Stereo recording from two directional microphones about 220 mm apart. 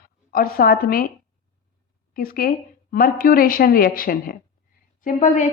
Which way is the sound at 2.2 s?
40° left (ahead or behind).